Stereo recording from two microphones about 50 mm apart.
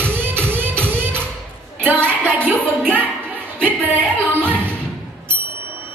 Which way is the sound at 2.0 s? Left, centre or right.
Left.